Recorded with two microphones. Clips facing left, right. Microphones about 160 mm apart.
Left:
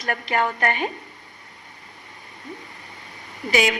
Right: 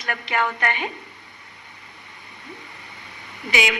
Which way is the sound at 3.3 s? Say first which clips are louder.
Left 3 dB; 40° left (ahead or behind).